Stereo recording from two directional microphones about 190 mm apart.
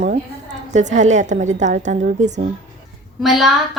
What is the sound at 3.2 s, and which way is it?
Speech, centre (ahead or behind).